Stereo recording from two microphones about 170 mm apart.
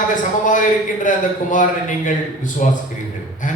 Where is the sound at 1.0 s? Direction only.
50° left (ahead or behind).